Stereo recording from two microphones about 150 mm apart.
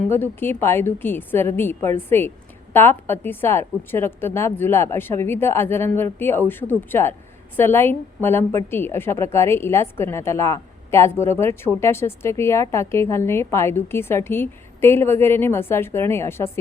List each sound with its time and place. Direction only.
0.1 s a woman's voice: 15° left (ahead or behind)